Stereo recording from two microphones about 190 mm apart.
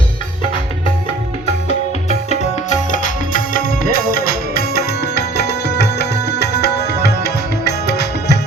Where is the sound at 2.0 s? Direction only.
35° left (ahead or behind).